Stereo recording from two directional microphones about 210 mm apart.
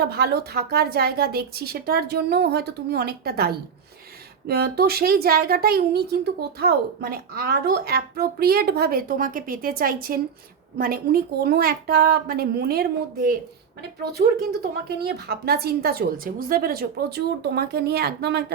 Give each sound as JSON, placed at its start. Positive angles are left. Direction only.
{"t": 0.0, "sound": "a woman's voice", "side_deg": -50}